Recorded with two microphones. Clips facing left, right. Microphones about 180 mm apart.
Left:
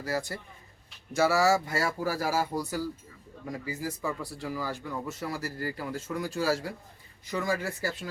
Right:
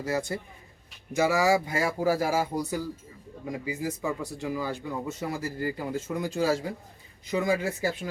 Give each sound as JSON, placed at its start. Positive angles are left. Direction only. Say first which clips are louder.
{"t": 0.0, "sound": "speech", "louder": "right 3 dB", "side_deg": -20}